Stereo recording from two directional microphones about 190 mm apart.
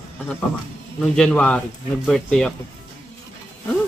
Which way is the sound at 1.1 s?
5° left (ahead or behind).